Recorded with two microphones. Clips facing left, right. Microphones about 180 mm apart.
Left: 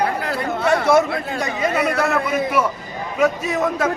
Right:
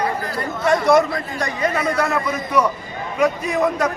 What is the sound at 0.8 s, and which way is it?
Speech, 5° left (ahead or behind).